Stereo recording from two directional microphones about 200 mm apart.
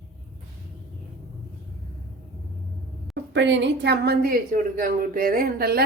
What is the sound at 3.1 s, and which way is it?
A woman's voice, 65° right (ahead or behind).